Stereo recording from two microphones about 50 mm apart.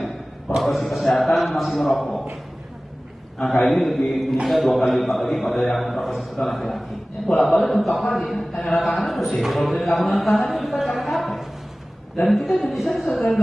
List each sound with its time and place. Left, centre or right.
0.6 s mantra: centre
1.2 s a sound: centre
1.8 s a man's voice: centre
3.3 s a man's voice: centre
3.9 s a man's voice: centre
11.0 s a sound: centre
12.2 s a man's voice: centre